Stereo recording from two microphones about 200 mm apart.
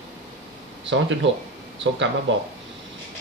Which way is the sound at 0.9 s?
70° right (ahead or behind).